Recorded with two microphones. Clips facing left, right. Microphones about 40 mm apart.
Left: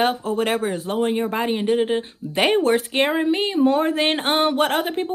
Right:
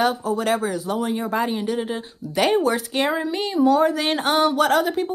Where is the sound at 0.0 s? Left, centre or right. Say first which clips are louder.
Even; left.